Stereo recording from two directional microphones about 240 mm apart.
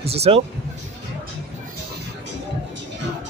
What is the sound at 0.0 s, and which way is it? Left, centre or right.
Speech, right.